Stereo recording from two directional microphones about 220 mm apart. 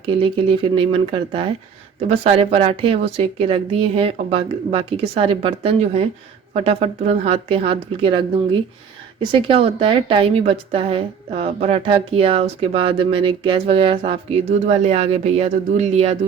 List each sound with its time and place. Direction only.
0.0 s a woman's voice: 25° right (ahead or behind)